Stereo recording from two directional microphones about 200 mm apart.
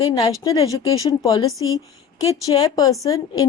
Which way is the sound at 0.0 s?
20° left (ahead or behind).